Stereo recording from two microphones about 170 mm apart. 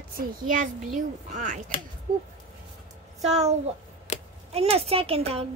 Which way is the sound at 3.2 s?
40° right (ahead or behind).